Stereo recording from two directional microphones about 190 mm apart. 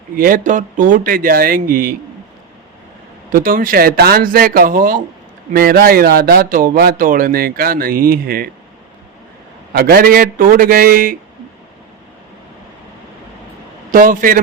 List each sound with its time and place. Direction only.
0.2 s speech: 45° right (ahead or behind)
3.3 s speech: 45° right (ahead or behind)
9.7 s speech: 50° right (ahead or behind)
13.9 s speech: 45° right (ahead or behind)